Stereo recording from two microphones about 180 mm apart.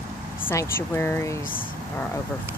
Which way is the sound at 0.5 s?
15° left (ahead or behind).